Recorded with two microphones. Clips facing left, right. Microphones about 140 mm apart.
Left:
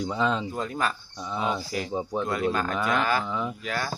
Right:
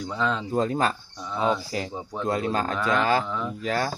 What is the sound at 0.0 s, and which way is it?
Speech, 15° left (ahead or behind).